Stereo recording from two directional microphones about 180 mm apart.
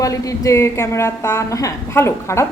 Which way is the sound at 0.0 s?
20° left (ahead or behind).